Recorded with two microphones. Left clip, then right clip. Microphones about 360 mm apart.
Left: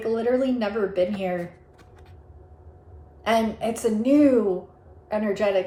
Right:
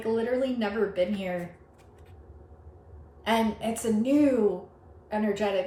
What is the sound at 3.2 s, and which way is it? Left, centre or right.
A woman's voice, centre.